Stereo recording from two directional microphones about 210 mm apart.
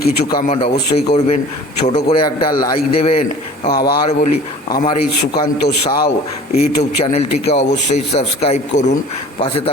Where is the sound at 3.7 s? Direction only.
45° left (ahead or behind).